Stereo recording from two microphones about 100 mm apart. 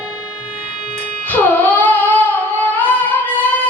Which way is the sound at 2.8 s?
15° left (ahead or behind).